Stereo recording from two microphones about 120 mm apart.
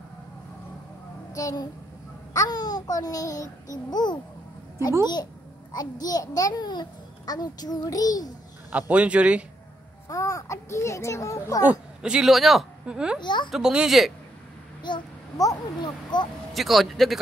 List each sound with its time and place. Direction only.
1.3 s a woman's voice: 30° left (ahead or behind)
8.7 s speech: 10° right (ahead or behind)
10.0 s a child's voice: 30° left (ahead or behind)
11.6 s a woman's voice: 10° right (ahead or behind)
13.2 s speech: 40° left (ahead or behind)
13.5 s speech: 5° right (ahead or behind)
14.8 s a child's voice: 40° left (ahead or behind)
16.5 s speech: centre (ahead or behind)